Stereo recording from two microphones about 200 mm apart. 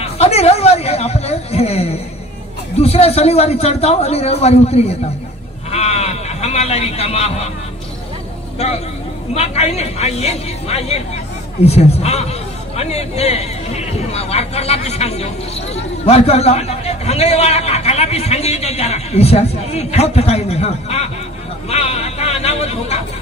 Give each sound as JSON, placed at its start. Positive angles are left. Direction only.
{"t": 0.0, "sound": "a man's voice", "side_deg": 30}
{"t": 8.5, "sound": "a man's voice", "side_deg": 30}